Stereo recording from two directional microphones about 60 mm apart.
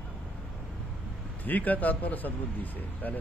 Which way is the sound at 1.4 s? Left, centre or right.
Left.